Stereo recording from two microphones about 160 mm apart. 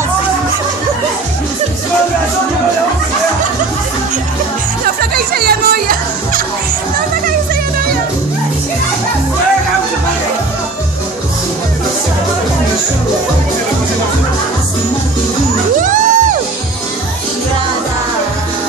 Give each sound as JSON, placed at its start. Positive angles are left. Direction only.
{"t": 5.1, "sound": "music", "side_deg": -70}
{"t": 15.8, "sound": "music", "side_deg": -55}